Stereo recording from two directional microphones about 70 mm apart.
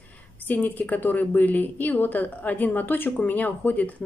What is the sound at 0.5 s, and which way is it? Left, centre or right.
A woman's voice, left.